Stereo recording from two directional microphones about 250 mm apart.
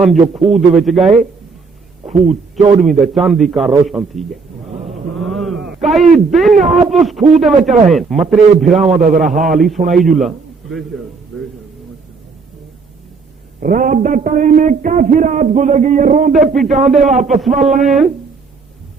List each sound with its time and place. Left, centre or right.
0.0 s a man's voice: centre
2.1 s a man's voice: right
3.0 s a man's voice: centre
5.1 s a sound: centre
6.1 s a man's voice: centre
9.0 s speech: right
9.2 s a man's voice: centre
13.6 s speech: right
16.6 s a man's voice: centre